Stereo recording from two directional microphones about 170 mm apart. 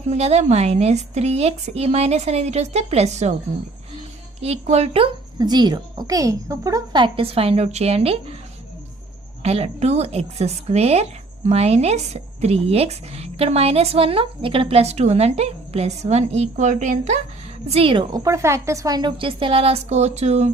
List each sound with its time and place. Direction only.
0.0 s speech: 40° right (ahead or behind)
4.4 s speech: 40° right (ahead or behind)
5.4 s a woman's voice: 25° right (ahead or behind)
9.4 s speech: 35° right (ahead or behind)
17.7 s speech: 35° right (ahead or behind)